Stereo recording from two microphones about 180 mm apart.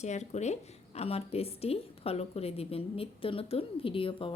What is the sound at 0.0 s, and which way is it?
Speech, 40° left (ahead or behind).